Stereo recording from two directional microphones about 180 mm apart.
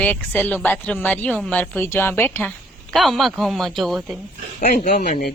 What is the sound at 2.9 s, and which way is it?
Speech, centre (ahead or behind).